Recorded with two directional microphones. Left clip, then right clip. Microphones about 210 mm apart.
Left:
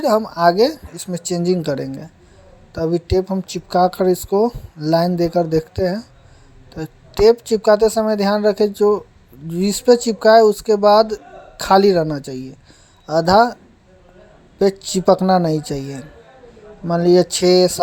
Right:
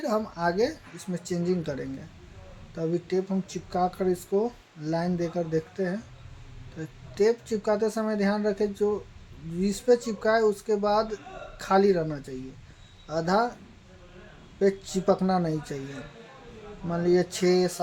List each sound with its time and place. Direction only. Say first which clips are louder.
0.0 s speech: left 13 dB; 40° left (ahead or behind)
14.6 s speech: left 9 dB; 40° left (ahead or behind)